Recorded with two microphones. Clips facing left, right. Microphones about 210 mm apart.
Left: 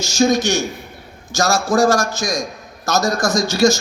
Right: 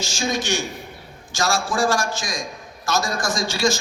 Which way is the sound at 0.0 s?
40° left (ahead or behind).